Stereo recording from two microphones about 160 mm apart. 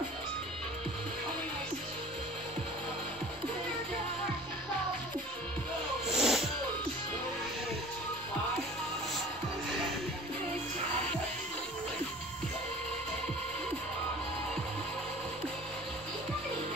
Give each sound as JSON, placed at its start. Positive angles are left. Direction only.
{"t": 6.0, "sound": "music", "side_deg": 0}